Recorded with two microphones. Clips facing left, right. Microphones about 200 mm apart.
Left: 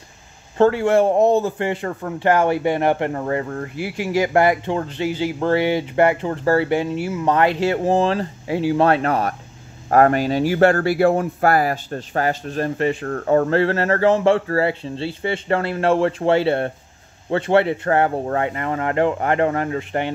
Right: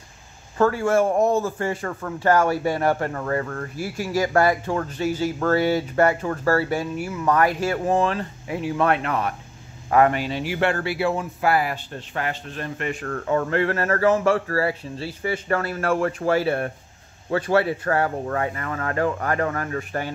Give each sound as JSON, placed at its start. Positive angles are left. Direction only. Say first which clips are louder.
{"t": 0.6, "sound": "speech", "louder": "left 4 dB", "side_deg": 25}
{"t": 1.4, "sound": "speech", "louder": "left 3 dB", "side_deg": 20}